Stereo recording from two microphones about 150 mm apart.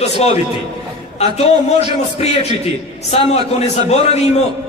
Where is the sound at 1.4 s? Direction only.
45° left (ahead or behind).